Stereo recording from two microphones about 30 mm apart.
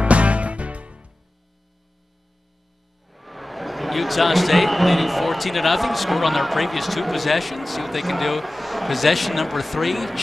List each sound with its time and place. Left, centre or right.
0.0 s music: right
3.1 s speech: centre